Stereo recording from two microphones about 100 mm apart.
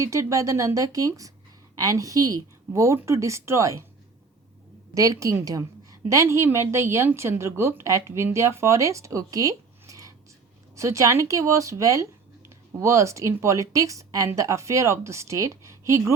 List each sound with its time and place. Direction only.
0.0 s a woman's voice: 30° right (ahead or behind)
4.9 s a woman's voice: 35° right (ahead or behind)